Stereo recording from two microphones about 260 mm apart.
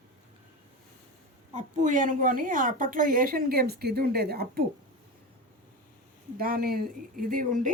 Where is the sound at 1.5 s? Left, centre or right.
Right.